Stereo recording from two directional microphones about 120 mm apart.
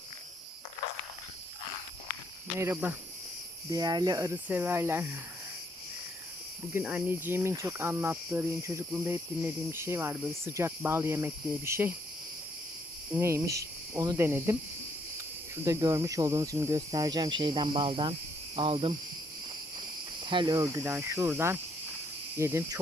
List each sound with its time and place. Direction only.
2.6 s speech: 20° right (ahead or behind)
3.7 s speech: 35° right (ahead or behind)
4.4 s speech: 15° right (ahead or behind)
6.8 s speech: 15° right (ahead or behind)
13.1 s speech: 20° right (ahead or behind)
14.2 s speech: 20° right (ahead or behind)
15.6 s speech: 30° right (ahead or behind); by 18.1 s 45° right (ahead or behind)
18.5 s cricket: 50° right (ahead or behind)
20.2 s speech: 40° right (ahead or behind)
20.8 s speech: 20° right (ahead or behind)